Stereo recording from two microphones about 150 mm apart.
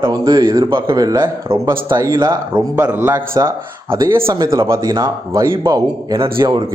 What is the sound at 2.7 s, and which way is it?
Speech, 15° right (ahead or behind).